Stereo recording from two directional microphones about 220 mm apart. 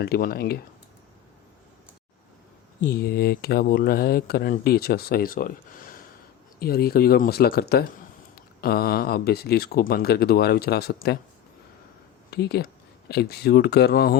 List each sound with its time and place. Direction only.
0.0 s speech: 45° left (ahead or behind)
3.0 s speech: 45° left (ahead or behind)
12.3 s speech: 45° left (ahead or behind)